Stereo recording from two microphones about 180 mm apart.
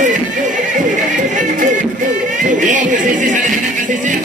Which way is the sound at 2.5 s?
45° right (ahead or behind).